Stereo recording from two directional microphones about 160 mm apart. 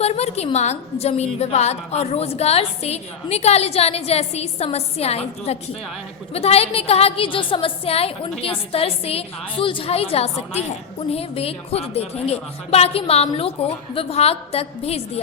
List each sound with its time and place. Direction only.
0.0 s a woman's voice: 40° left (ahead or behind)